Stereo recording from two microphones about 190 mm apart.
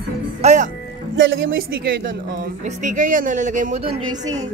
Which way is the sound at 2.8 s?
45° right (ahead or behind).